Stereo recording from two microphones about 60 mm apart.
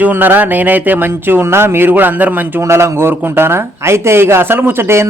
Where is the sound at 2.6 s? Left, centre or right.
Right.